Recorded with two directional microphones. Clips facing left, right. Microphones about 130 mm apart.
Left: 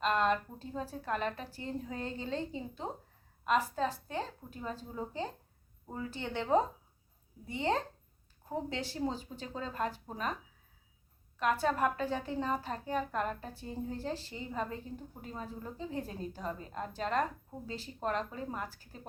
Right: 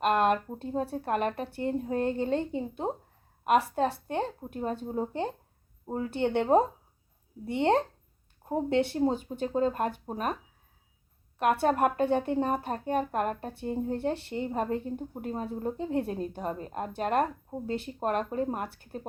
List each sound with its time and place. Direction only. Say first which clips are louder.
0.0 s a woman's voice: right 5 dB; 60° right (ahead or behind)
11.3 s a woman's voice: right 6 dB; 60° right (ahead or behind)